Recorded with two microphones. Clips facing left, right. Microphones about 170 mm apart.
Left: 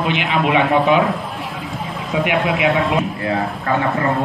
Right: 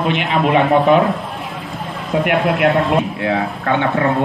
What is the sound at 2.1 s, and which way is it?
Speech, centre (ahead or behind).